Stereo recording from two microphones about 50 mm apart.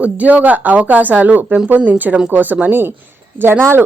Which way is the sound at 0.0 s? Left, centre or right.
Right.